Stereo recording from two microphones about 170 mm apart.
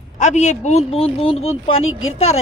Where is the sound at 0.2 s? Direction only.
45° left (ahead or behind).